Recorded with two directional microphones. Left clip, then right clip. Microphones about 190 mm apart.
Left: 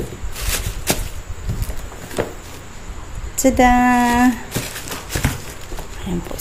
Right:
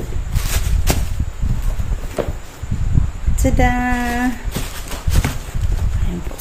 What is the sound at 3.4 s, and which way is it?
Speech, 30° left (ahead or behind).